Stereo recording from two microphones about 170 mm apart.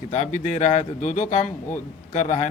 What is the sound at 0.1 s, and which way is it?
Speech, 45° left (ahead or behind).